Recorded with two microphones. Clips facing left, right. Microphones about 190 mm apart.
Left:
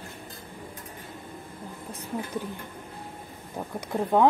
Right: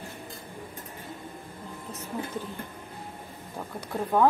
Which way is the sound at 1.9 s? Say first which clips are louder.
Left 1 dB; 15° left (ahead or behind).